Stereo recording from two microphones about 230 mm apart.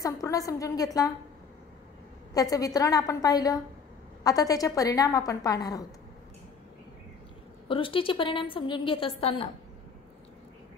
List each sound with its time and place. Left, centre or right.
0.0 s a woman's voice: centre
2.5 s a woman's voice: centre
7.6 s a woman's voice: left